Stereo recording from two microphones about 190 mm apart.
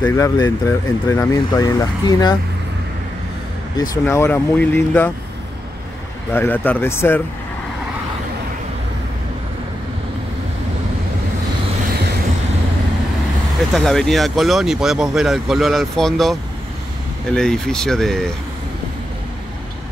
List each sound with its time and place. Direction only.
0.0 s speech: 15° left (ahead or behind)
3.9 s speech: 15° left (ahead or behind)
6.3 s speech: 10° left (ahead or behind)
13.7 s speech: centre (ahead or behind)